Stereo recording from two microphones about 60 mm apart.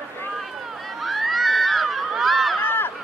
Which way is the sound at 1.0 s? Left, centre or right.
Centre.